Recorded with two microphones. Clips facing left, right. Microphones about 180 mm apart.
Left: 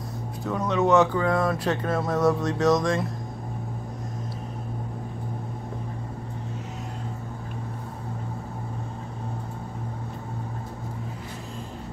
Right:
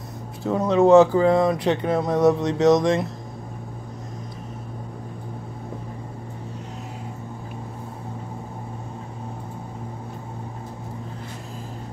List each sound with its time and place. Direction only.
0.5 s speech: 30° right (ahead or behind)